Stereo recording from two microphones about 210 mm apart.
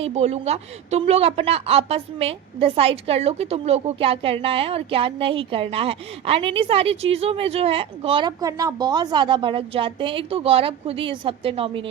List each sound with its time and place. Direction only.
0.0 s a woman's voice: 30° right (ahead or behind)